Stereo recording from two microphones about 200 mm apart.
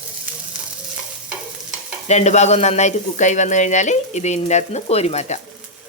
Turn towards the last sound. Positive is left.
turn(degrees=35)  # may be behind; listen again after turning